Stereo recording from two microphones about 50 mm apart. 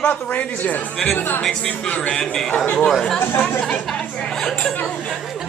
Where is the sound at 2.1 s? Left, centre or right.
Centre.